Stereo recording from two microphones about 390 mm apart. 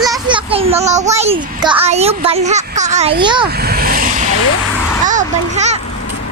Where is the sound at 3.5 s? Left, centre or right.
Right.